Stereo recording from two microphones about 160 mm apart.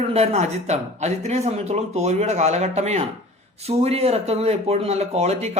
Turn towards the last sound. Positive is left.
turn(degrees=-40)  # may be behind; listen again after turning